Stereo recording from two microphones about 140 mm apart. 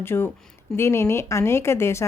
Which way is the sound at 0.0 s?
15° left (ahead or behind).